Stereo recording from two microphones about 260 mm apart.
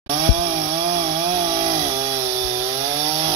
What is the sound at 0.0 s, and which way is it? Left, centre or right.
Chainsaw, centre.